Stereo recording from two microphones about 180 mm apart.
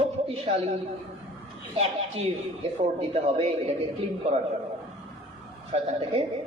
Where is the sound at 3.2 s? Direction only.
35° right (ahead or behind).